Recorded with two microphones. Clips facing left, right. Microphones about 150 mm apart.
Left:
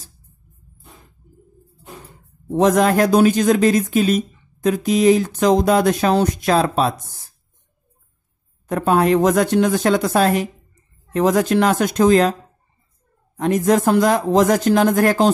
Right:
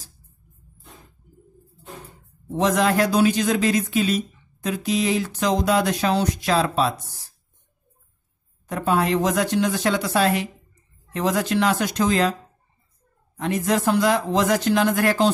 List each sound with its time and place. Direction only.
2.5 s speech: 50° left (ahead or behind)
8.6 s speech: 50° left (ahead or behind)
13.4 s speech: 45° left (ahead or behind)